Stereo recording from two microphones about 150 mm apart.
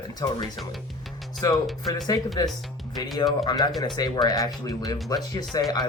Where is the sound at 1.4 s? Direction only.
20° left (ahead or behind).